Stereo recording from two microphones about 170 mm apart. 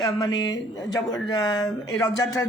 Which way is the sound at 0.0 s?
25° left (ahead or behind).